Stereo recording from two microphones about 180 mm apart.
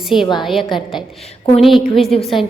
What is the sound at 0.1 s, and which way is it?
Speech, 30° left (ahead or behind).